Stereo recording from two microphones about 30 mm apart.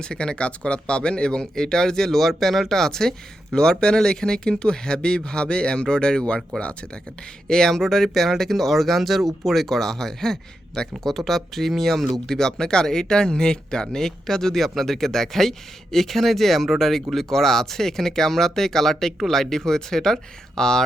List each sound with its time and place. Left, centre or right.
0.0 s speech: left
1.5 s speech: centre
2.1 s speech: centre; by 6.3 s left
6.6 s speech: left
7.4 s speech: centre
12.2 s speech: centre